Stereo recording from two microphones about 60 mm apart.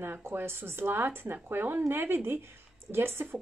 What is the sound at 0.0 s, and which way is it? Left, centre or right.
Speech, right.